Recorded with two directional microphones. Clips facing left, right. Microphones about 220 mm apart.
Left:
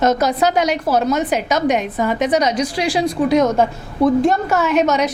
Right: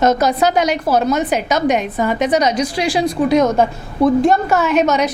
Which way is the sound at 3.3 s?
25° right (ahead or behind).